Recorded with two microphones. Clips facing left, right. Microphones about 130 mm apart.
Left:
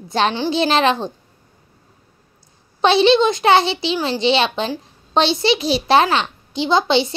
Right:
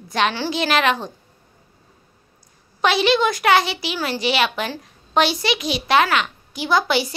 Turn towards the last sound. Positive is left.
turn(degrees=25)  # may be behind; listen again after turning